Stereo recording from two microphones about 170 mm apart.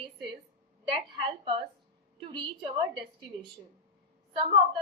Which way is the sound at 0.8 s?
30° right (ahead or behind).